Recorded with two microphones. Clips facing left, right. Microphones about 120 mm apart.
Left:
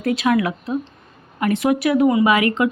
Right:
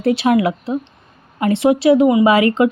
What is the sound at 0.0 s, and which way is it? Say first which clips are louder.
Speech: right 4 dB; 30° right (ahead or behind).